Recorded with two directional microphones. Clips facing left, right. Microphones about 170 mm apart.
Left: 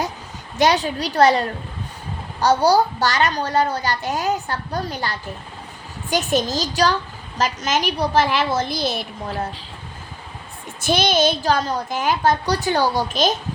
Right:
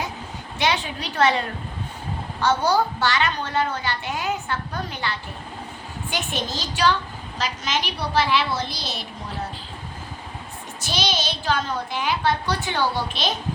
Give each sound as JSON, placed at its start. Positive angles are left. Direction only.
{"t": 0.6, "sound": "a woman's voice", "side_deg": 40}
{"t": 10.8, "sound": "a woman's voice", "side_deg": 55}